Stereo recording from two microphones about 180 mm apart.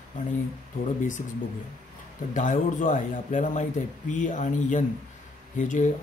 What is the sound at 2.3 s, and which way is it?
Speech, 45° left (ahead or behind).